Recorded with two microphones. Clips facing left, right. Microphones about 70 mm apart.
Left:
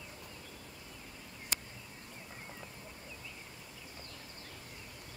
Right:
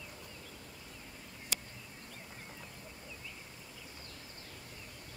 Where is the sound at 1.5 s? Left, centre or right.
Left.